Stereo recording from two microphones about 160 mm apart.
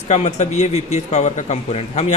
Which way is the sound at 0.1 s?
45° left (ahead or behind).